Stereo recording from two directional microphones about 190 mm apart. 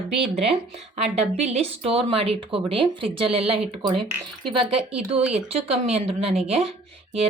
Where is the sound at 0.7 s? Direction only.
35° right (ahead or behind).